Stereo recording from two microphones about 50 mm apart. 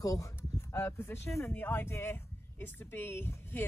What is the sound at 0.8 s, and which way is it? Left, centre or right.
A woman's voice, left.